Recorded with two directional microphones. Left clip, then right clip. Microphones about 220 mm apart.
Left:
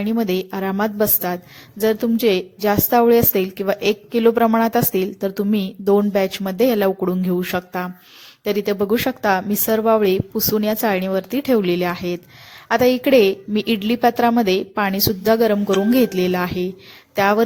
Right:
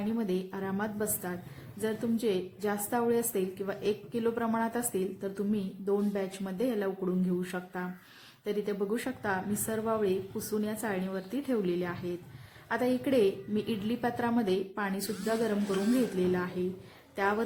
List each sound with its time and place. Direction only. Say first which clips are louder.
0.0 s a woman's voice: left 12 dB; 40° left (ahead or behind)